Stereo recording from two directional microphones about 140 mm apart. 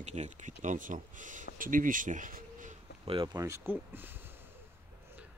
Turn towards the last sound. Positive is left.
turn(degrees=-15)  # may be behind; listen again after turning